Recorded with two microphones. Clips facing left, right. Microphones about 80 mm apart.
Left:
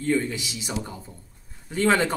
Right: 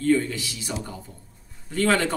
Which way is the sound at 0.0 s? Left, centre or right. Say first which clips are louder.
Right 3 dB; centre.